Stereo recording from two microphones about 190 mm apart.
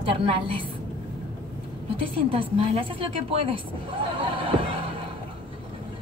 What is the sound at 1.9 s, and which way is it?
A woman's voice, 30° right (ahead or behind).